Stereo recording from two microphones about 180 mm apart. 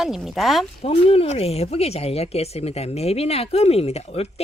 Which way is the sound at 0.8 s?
30° left (ahead or behind).